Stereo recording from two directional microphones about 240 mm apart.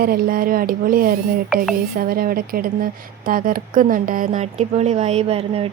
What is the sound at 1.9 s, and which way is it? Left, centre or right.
A woman's voice, right.